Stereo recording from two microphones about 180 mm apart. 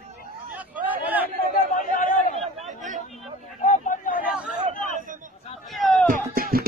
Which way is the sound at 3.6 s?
45° left (ahead or behind).